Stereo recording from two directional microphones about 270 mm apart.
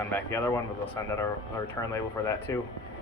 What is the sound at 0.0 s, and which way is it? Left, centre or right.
Speech, centre.